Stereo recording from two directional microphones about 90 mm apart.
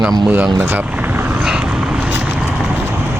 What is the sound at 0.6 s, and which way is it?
Speech, 25° right (ahead or behind).